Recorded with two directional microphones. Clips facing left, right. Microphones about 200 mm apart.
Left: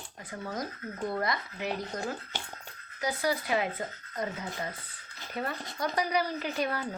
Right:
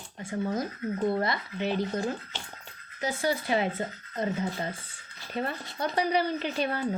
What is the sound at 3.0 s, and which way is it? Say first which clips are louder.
A woman's voice: right 2 dB; 25° right (ahead or behind).